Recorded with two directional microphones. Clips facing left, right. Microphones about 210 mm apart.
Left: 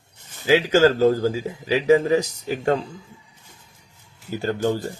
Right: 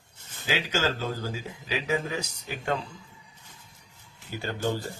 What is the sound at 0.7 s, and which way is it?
Speech, 45° left (ahead or behind).